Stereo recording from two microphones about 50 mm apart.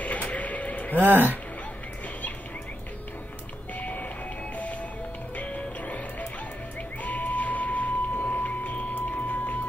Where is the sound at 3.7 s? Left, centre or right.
Left.